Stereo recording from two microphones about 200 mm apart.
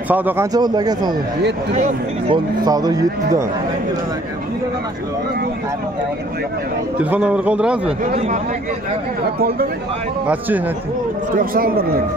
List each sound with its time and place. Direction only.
0.1 s speech: 10° right (ahead or behind)
1.7 s speech: 30° right (ahead or behind)
7.0 s a man's voice: 5° right (ahead or behind)
8.0 s speech: 40° right (ahead or behind)
11.3 s speech: 45° right (ahead or behind)